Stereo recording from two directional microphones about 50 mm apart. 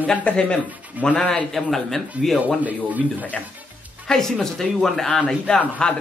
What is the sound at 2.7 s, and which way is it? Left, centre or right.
Speech, right.